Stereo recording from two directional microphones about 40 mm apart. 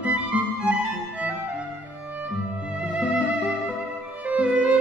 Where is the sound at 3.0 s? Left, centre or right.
Right.